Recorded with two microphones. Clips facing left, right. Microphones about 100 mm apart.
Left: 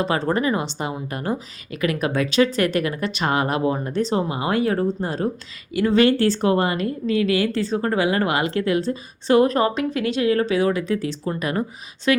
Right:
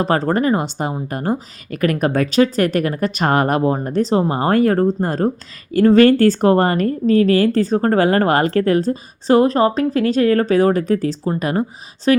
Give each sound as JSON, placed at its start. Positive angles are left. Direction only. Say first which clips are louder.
{"t": 0.0, "sound": "a woman's voice", "louder": "right 4 dB", "side_deg": -40}